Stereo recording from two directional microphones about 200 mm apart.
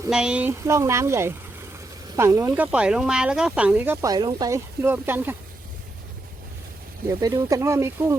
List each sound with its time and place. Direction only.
0.1 s speech: 5° right (ahead or behind)
7.1 s speech: 20° right (ahead or behind)